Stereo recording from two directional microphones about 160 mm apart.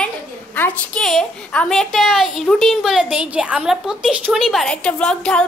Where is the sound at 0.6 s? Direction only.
10° left (ahead or behind).